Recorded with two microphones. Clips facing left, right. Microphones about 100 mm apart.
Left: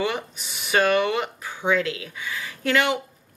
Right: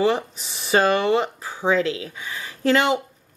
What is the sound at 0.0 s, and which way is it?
Speech, 30° right (ahead or behind).